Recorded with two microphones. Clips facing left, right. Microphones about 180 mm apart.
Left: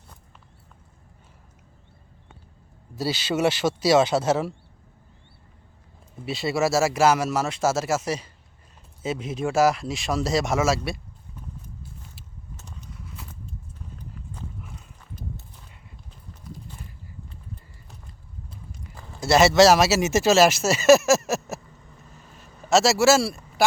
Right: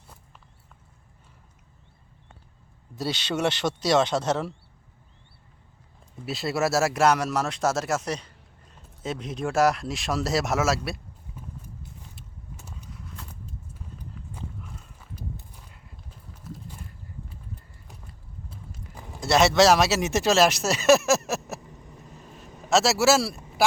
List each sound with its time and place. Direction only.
2.9 s speech: centre (ahead or behind)
6.2 s speech: centre (ahead or behind)
12.5 s a sound: 10° right (ahead or behind)
14.9 s horse: 10° right (ahead or behind)
16.3 s a sound: 5° right (ahead or behind)
18.5 s walk: 10° right (ahead or behind)
19.2 s speech: centre (ahead or behind)
21.6 s vehicle: 15° right (ahead or behind)
22.2 s a sound: centre (ahead or behind)
22.7 s speech: centre (ahead or behind)